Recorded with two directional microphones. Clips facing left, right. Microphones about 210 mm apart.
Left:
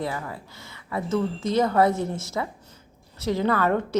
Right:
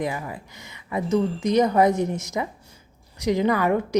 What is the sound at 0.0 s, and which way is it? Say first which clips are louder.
A woman's voice: right 2 dB; 15° right (ahead or behind).